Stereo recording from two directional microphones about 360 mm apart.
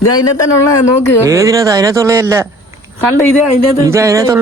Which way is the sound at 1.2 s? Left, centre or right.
Centre.